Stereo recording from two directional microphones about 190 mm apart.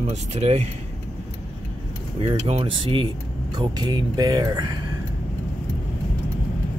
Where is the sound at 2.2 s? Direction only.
30° right (ahead or behind).